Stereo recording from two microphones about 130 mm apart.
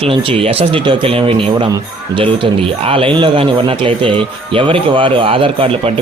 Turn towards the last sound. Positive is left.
turn(degrees=-45)  # may be behind; listen again after turning